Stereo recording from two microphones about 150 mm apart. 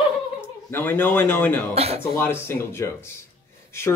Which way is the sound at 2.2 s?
15° left (ahead or behind).